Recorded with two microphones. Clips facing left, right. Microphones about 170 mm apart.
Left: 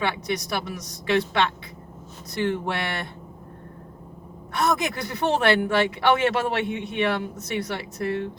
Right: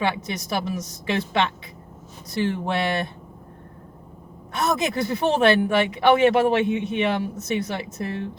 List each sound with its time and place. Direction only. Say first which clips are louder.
0.3 s speech: right 1 dB; 20° right (ahead or behind)
4.5 s speech: right 1 dB; 20° right (ahead or behind)